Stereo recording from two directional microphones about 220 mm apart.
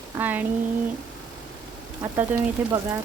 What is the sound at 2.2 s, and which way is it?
Speech, 10° right (ahead or behind).